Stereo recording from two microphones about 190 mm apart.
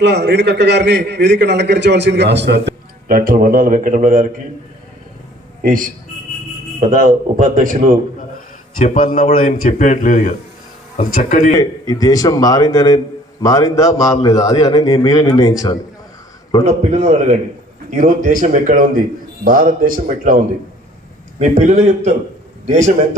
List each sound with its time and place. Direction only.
0.0 s a man's voice: 60° right (ahead or behind); by 4.3 s 45° right (ahead or behind)
5.6 s a man's voice: 45° right (ahead or behind)
8.8 s a man's voice: 50° left (ahead or behind)
11.5 s a man's voice: 20° left (ahead or behind)
16.8 s a man's voice: 35° right (ahead or behind)
21.3 s a man's voice: 35° right (ahead or behind)